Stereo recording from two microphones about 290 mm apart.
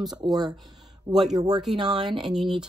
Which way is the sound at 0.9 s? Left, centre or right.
Centre.